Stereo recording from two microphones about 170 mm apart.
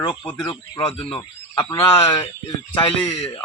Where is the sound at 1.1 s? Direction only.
20° left (ahead or behind).